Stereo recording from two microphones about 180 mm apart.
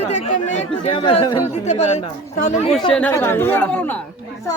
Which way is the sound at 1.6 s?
40° left (ahead or behind).